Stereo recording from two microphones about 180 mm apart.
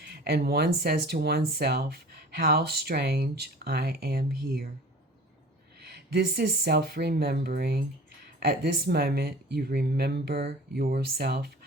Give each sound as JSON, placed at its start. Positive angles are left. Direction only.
{"t": 0.0, "sound": "speech", "side_deg": -60}
{"t": 5.8, "sound": "speech", "side_deg": -60}